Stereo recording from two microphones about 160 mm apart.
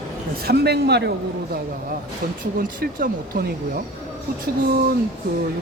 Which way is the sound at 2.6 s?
60° right (ahead or behind).